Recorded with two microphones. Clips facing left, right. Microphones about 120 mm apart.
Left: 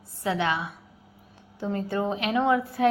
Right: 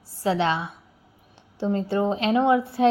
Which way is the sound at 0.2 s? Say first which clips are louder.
Right 3 dB; 30° right (ahead or behind).